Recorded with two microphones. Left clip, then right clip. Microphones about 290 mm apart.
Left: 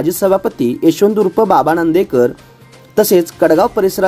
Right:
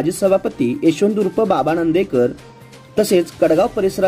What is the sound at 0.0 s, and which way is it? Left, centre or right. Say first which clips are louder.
Speech: left 3 dB; centre.